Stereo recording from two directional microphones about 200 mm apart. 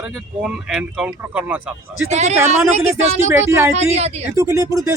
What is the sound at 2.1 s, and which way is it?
Speech, 35° right (ahead or behind).